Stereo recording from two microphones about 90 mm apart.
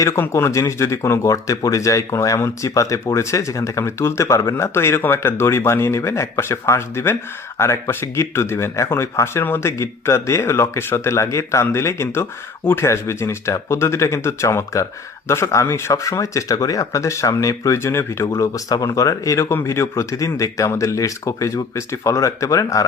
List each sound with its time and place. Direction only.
0.0 s speech: 30° left (ahead or behind)